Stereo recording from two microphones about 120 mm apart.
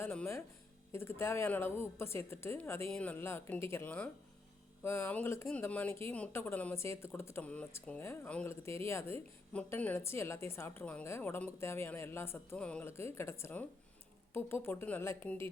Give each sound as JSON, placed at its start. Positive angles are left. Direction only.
{"t": 0.0, "sound": "speech", "side_deg": 15}
{"t": 7.4, "sound": "speech", "side_deg": 10}
{"t": 12.5, "sound": "speech", "side_deg": 10}
{"t": 12.9, "sound": "speech", "side_deg": 20}